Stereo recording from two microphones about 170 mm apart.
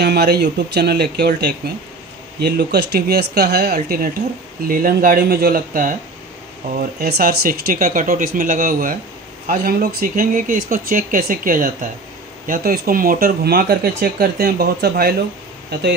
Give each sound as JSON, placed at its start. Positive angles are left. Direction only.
{"t": 0.0, "sound": "speech", "side_deg": -70}